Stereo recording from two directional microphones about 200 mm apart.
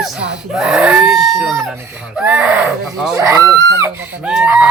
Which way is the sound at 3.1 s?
15° right (ahead or behind).